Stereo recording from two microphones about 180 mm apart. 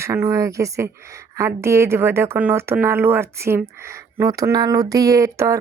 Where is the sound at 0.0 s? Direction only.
15° right (ahead or behind).